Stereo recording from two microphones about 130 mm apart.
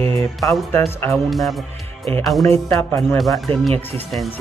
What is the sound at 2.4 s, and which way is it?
Music, 20° left (ahead or behind).